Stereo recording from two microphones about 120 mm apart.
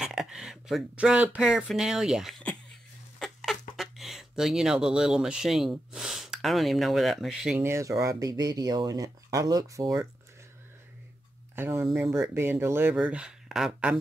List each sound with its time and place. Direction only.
0.0 s speech: 5° right (ahead or behind)
7.5 s speech: 20° right (ahead or behind)
11.5 s speech: 20° right (ahead or behind)
12.9 s speech: 10° right (ahead or behind)